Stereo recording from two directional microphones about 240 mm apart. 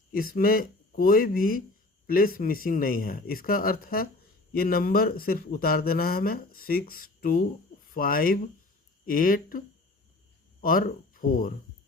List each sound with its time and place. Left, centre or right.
0.1 s speech: left